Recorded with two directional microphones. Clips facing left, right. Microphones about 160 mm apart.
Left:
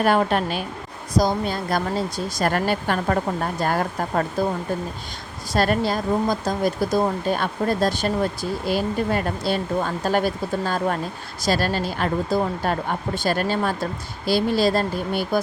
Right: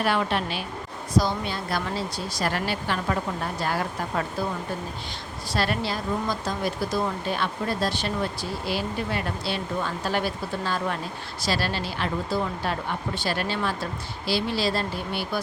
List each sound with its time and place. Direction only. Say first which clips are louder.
0.0 s speech: left 5 dB; 45° left (ahead or behind)
5.5 s speech: left 6 dB; 45° left (ahead or behind)